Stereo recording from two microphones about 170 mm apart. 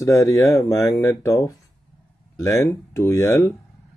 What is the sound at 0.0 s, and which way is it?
Speech, 20° left (ahead or behind).